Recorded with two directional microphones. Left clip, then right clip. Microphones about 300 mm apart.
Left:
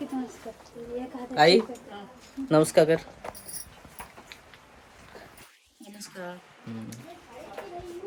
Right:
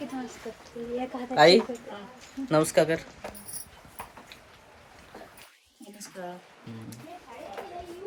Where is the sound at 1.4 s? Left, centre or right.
Centre.